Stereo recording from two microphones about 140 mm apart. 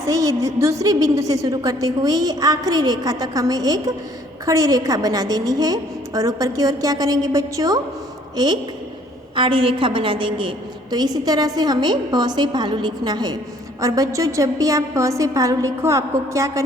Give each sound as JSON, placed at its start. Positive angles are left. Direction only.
{"t": 0.1, "sound": "a woman's voice", "side_deg": -25}